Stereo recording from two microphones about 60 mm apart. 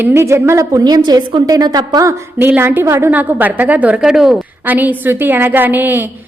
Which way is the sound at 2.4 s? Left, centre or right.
Right.